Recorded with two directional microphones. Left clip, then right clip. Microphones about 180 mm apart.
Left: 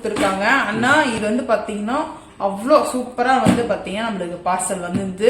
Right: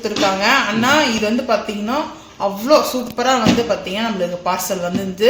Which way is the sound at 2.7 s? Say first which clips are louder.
Right 1 dB; 45° right (ahead or behind).